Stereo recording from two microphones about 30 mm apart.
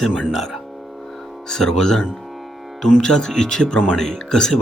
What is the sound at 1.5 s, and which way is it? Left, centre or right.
Speech, centre.